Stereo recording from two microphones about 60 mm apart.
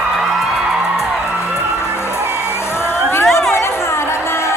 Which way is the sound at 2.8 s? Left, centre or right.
Left.